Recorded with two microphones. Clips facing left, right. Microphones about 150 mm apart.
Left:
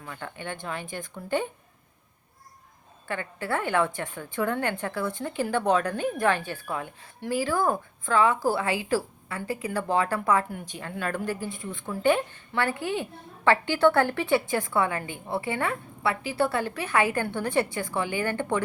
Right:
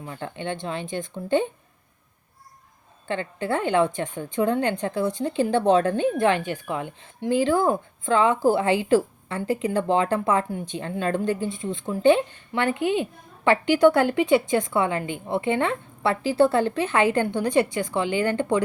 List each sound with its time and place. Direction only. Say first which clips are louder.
0.0 s a woman's voice: right 5 dB; 25° right (ahead or behind)
3.1 s a woman's voice: right 4 dB; 20° right (ahead or behind)